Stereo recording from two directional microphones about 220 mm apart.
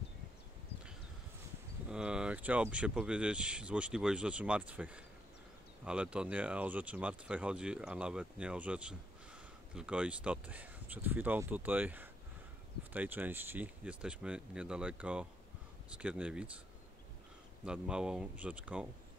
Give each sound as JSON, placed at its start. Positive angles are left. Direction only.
{"t": 1.9, "sound": "speech", "side_deg": -5}
{"t": 17.6, "sound": "speech", "side_deg": -5}